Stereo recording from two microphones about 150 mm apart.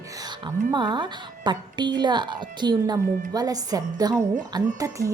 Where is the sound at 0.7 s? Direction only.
30° right (ahead or behind).